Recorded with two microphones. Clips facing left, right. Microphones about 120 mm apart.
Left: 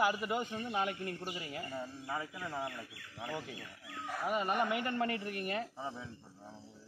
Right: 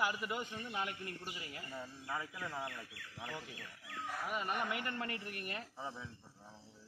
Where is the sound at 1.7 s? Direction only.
15° left (ahead or behind).